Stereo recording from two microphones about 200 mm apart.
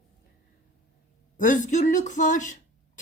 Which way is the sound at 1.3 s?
40° left (ahead or behind).